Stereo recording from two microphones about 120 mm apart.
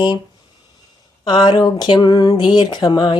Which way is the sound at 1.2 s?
40° left (ahead or behind).